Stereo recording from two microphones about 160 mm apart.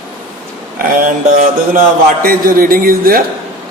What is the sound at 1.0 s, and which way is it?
Music, 50° right (ahead or behind).